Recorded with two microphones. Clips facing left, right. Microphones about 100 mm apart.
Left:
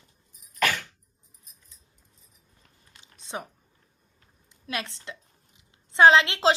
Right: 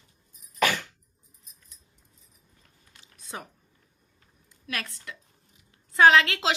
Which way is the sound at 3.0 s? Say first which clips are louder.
Left 4 dB; 25° left (ahead or behind).